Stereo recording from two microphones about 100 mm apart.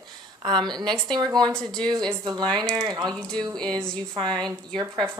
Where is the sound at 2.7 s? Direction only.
40° right (ahead or behind).